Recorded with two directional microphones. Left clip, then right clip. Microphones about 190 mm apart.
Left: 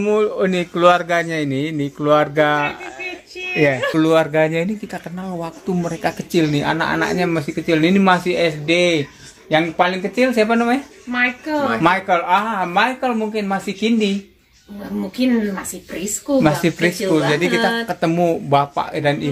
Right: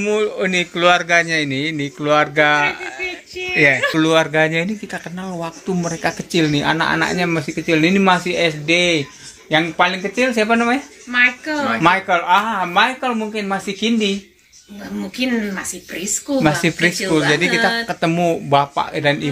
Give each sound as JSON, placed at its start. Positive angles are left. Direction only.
{"t": 0.0, "sound": "a man's voice", "side_deg": 25}
{"t": 11.1, "sound": "speech", "side_deg": 25}
{"t": 11.8, "sound": "speech", "side_deg": 0}
{"t": 15.0, "sound": "speech", "side_deg": 25}
{"t": 16.3, "sound": "speech", "side_deg": 0}